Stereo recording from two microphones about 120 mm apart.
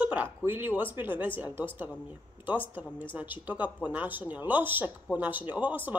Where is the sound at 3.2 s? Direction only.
15° right (ahead or behind).